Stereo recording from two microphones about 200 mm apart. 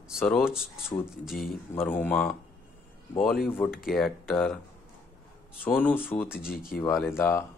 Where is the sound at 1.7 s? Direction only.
10° left (ahead or behind).